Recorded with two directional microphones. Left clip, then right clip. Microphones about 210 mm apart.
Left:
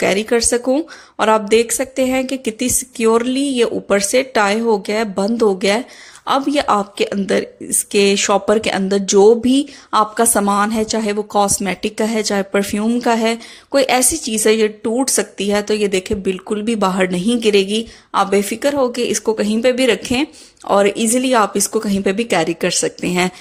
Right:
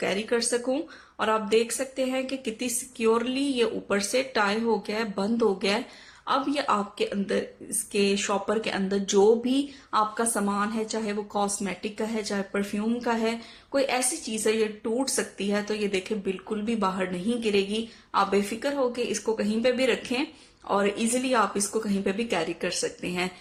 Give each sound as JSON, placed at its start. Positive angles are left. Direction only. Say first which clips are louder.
{"t": 0.0, "sound": "speech", "louder": "left 11 dB", "side_deg": 40}